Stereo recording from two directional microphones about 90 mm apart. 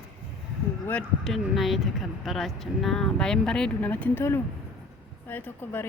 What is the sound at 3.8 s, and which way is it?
Speech, 20° left (ahead or behind).